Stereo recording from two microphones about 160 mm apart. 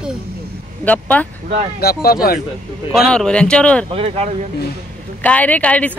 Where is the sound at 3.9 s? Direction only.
40° right (ahead or behind).